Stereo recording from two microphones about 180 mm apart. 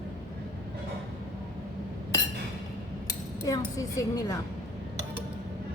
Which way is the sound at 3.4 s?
20° left (ahead or behind).